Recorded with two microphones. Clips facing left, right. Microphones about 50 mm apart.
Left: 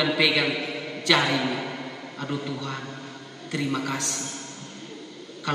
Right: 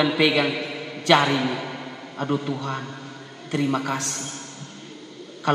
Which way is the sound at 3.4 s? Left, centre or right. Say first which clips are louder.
Right 4 dB; centre.